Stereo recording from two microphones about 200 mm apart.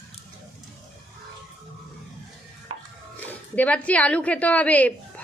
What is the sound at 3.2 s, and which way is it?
A woman's voice, 10° left (ahead or behind).